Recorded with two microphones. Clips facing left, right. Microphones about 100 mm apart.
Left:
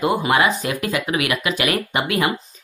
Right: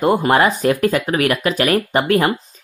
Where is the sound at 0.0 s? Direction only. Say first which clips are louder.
Right 4 dB; 45° right (ahead or behind).